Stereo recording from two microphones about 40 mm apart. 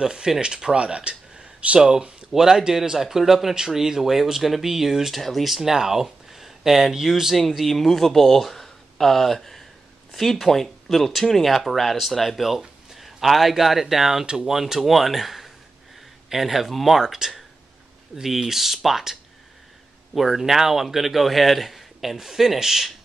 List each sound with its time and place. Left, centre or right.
0.0 s speech: centre
0.7 s speech: right; by 5.1 s centre
5.1 s speech: centre
5.6 s speech: centre
7.6 s speech: centre
20.2 s speech: centre